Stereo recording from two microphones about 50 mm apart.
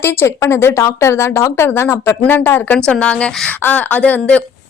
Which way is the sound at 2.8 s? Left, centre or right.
Centre.